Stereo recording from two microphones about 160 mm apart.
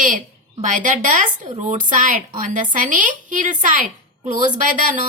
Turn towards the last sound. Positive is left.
turn(degrees=-55)  # may be behind; listen again after turning